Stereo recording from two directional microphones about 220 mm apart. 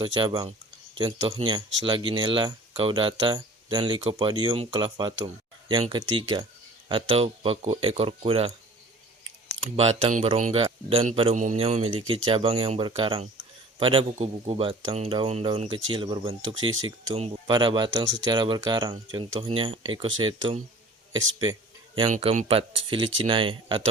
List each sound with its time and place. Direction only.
0.0 s speech: 20° right (ahead or behind)
5.2 s a sound: 20° right (ahead or behind)
5.8 s speech: 20° right (ahead or behind)
9.7 s speech: 25° right (ahead or behind)
22.1 s speech: 30° right (ahead or behind)